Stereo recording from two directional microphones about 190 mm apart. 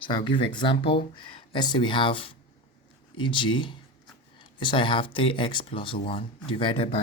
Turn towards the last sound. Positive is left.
turn(degrees=30)  # may be behind; listen again after turning